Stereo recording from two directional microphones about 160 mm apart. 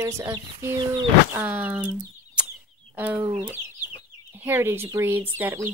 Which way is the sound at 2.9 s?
10° right (ahead or behind).